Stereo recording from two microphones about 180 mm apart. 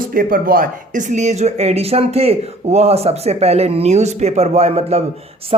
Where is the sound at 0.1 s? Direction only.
50° right (ahead or behind).